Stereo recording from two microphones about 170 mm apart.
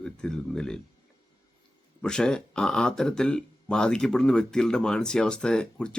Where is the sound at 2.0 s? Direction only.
5° left (ahead or behind).